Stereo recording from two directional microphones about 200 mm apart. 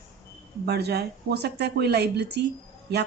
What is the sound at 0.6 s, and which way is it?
Speech, 55° right (ahead or behind).